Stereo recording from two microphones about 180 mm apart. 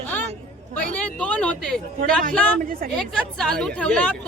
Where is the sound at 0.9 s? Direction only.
5° left (ahead or behind).